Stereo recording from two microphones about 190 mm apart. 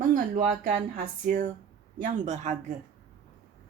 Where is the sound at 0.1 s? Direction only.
40° right (ahead or behind).